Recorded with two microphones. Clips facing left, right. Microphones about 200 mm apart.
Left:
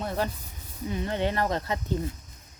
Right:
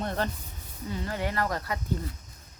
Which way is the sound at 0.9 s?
20° left (ahead or behind).